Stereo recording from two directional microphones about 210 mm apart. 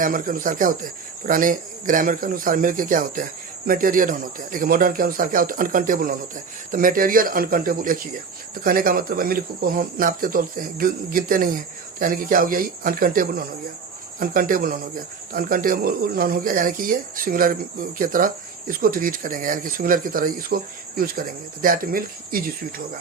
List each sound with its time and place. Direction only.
0.0 s speech: 40° right (ahead or behind)